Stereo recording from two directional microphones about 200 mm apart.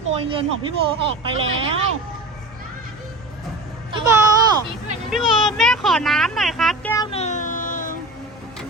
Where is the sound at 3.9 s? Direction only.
25° right (ahead or behind).